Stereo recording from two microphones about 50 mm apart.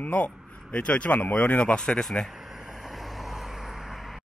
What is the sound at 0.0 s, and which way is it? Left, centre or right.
Speech, left.